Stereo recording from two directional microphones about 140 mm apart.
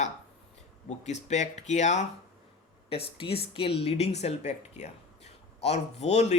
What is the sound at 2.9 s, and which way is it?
Speech, 45° left (ahead or behind).